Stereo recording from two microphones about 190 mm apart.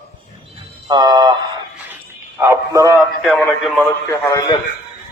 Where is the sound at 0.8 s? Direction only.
20° right (ahead or behind).